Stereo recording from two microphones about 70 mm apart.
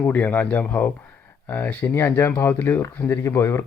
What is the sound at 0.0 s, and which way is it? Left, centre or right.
Speech, left.